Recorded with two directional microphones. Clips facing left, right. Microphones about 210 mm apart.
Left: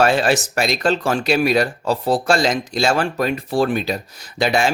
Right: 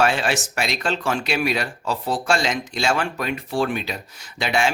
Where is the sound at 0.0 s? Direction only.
40° left (ahead or behind).